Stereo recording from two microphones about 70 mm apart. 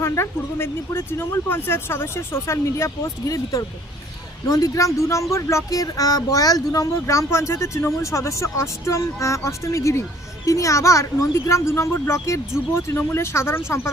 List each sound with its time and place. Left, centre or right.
0.0 s speech: left
3.2 s speech: left